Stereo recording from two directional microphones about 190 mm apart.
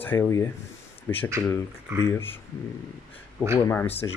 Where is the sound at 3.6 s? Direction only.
10° left (ahead or behind).